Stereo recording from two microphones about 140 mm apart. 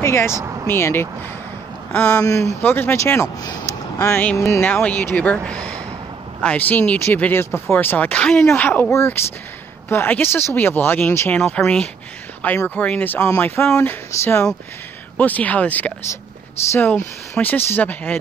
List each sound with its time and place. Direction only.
0.0 s speech: 20° left (ahead or behind)
3.4 s a sound: 25° left (ahead or behind)
4.5 s speech: 15° left (ahead or behind)